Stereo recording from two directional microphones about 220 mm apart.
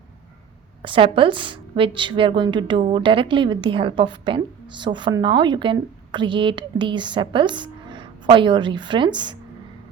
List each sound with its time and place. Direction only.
0.8 s a woman's voice: 25° right (ahead or behind)